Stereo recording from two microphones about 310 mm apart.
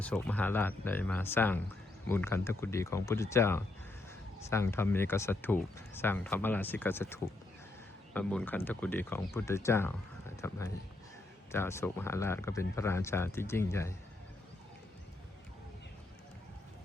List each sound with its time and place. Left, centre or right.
0.0 s speech: centre